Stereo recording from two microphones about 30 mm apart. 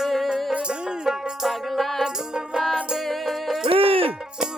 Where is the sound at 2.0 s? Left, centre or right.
Right.